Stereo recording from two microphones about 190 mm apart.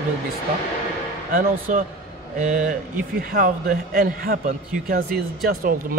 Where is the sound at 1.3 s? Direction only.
45° right (ahead or behind).